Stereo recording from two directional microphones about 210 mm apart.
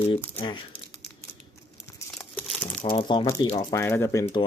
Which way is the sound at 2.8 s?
20° left (ahead or behind).